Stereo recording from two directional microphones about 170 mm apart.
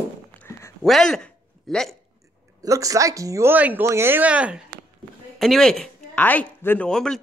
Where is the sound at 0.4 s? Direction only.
15° left (ahead or behind).